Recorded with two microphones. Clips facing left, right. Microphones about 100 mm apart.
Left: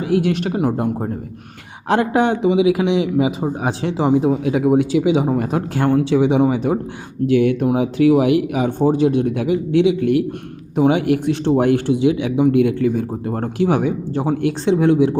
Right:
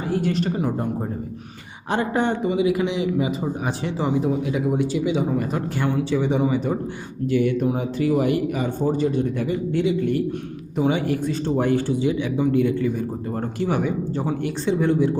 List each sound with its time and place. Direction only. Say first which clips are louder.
0.0 s speech: left 5 dB; 80° left
1.9 s a man's voice: left 6 dB; 85° left